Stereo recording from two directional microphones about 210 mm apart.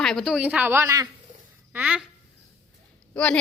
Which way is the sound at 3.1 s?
5° left (ahead or behind).